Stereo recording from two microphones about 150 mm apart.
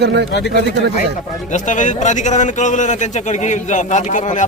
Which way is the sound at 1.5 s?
55° left (ahead or behind).